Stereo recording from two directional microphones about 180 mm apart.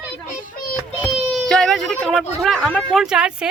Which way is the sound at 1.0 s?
5° left (ahead or behind).